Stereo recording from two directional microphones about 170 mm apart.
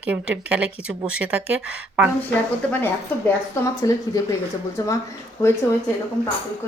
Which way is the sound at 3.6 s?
20° left (ahead or behind).